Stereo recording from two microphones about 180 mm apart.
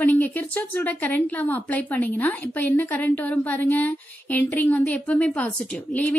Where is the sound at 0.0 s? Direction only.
10° left (ahead or behind).